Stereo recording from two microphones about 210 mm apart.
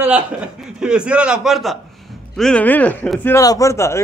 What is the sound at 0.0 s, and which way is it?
A man's voice, 5° right (ahead or behind).